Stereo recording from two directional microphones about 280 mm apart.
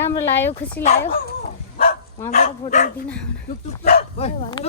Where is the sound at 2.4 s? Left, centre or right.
Left.